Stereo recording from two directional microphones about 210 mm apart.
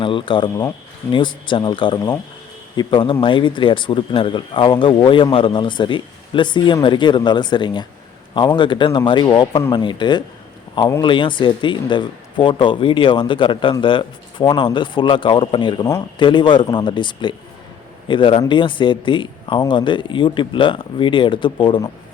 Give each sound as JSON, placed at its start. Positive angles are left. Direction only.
{"t": 0.0, "sound": "speech", "side_deg": 25}